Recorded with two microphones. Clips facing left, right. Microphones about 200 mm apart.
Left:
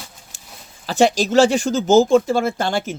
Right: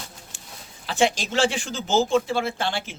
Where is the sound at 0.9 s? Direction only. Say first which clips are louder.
Left 6 dB; 40° left (ahead or behind).